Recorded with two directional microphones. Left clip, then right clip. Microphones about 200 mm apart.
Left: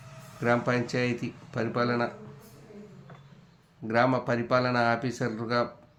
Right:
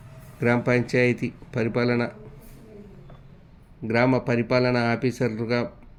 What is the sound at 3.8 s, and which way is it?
Speech, 25° right (ahead or behind).